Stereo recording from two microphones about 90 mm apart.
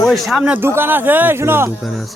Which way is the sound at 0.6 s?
25° right (ahead or behind).